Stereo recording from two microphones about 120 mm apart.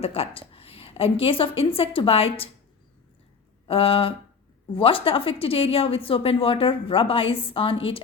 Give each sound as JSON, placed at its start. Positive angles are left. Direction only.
{"t": 0.0, "sound": "a woman's voice", "side_deg": 55}
{"t": 3.7, "sound": "a woman's voice", "side_deg": 50}